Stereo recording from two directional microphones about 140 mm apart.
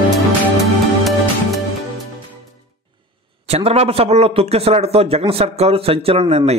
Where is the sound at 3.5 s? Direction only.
45° right (ahead or behind).